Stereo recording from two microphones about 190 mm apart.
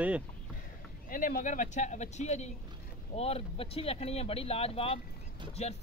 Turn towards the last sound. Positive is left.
turn(degrees=35)  # may be behind; listen again after turning